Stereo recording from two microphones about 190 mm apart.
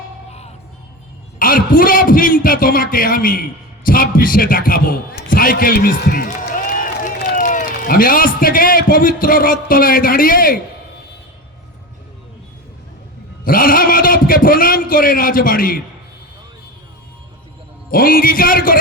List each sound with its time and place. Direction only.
1.4 s a man's voice: 45° left (ahead or behind)
13.4 s a man's voice: 50° left (ahead or behind)
17.9 s speech: 50° left (ahead or behind)